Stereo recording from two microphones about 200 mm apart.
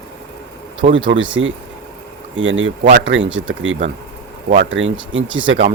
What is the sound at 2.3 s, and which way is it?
Speech, 70° right (ahead or behind).